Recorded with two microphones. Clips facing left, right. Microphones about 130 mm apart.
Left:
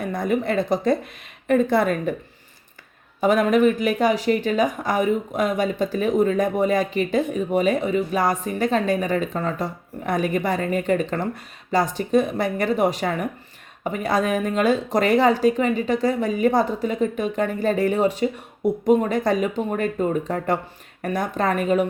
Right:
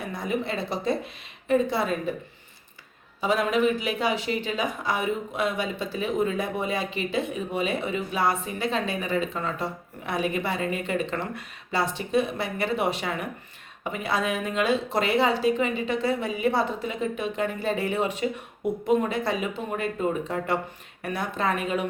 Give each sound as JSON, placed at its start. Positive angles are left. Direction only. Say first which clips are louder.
{"t": 0.1, "sound": "speech", "louder": "left 6 dB", "side_deg": 50}
{"t": 3.2, "sound": "speech", "louder": "left 6 dB", "side_deg": 50}